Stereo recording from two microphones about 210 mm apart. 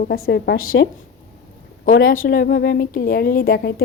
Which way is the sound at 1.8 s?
45° left (ahead or behind).